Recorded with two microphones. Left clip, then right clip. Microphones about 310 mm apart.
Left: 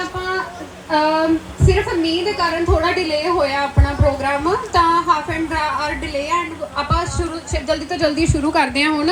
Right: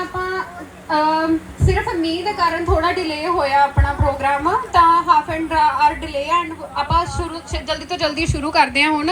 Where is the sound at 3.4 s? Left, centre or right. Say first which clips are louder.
Right 3 dB; right.